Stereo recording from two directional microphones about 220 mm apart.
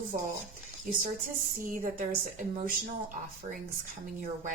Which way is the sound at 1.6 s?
35° right (ahead or behind).